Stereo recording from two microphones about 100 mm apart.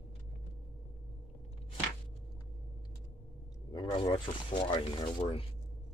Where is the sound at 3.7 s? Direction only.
45° left (ahead or behind); by 5.4 s 65° left (ahead or behind).